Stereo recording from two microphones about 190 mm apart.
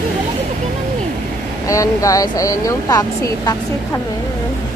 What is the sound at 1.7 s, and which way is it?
Speech, 15° left (ahead or behind).